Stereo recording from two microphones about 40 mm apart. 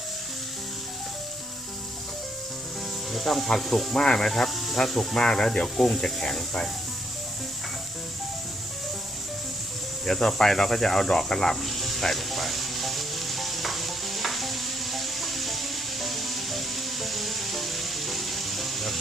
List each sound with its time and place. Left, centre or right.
3.1 s speech: centre
3.9 s speech: centre
4.3 s speech: centre
5.1 s speech: centre
5.6 s speech: centre
10.1 s speech: centre
11.6 s sizzle: centre